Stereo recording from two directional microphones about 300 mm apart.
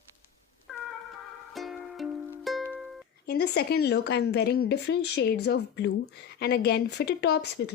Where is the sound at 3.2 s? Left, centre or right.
Left.